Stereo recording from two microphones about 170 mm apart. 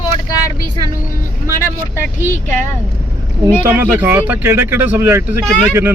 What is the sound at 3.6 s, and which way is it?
Speech, 10° right (ahead or behind).